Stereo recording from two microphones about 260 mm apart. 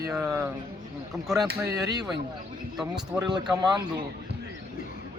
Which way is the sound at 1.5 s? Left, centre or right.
Right.